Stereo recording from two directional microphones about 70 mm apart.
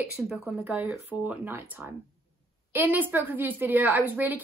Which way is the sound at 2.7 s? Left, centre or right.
Right.